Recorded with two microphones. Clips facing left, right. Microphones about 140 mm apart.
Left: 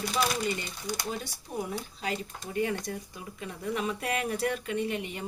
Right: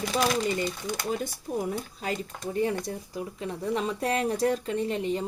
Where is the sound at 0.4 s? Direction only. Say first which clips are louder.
Right 4 dB; 50° right (ahead or behind).